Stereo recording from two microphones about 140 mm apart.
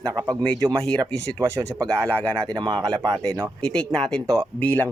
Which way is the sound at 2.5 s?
35° right (ahead or behind).